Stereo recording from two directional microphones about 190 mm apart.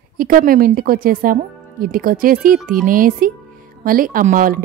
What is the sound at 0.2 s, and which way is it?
Speech, 50° right (ahead or behind).